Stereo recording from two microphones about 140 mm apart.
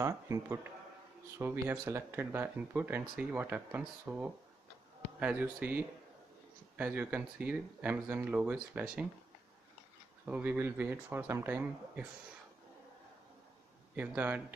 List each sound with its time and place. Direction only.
0.0 s speech: 20° right (ahead or behind)
10.2 s speech: 10° right (ahead or behind)
13.9 s speech: 10° right (ahead or behind)